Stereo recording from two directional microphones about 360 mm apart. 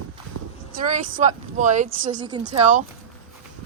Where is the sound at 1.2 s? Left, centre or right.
Centre.